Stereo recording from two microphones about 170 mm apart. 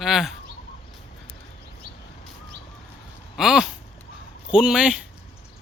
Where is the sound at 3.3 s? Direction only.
5° right (ahead or behind).